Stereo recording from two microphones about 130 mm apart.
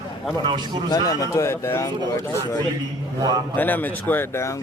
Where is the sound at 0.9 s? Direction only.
25° left (ahead or behind).